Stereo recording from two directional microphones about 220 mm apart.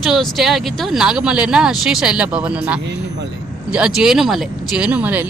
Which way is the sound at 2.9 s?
50° right (ahead or behind).